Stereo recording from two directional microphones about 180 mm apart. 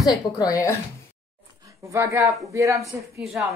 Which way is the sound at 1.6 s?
15° right (ahead or behind).